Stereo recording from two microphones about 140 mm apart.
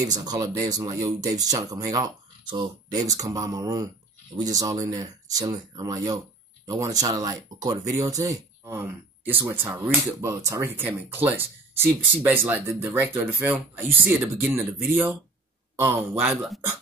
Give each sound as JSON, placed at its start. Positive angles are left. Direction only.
{"t": 0.0, "sound": "speech", "side_deg": -25}